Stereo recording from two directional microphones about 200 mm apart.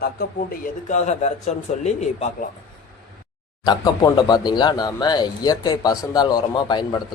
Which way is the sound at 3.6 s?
20° left (ahead or behind).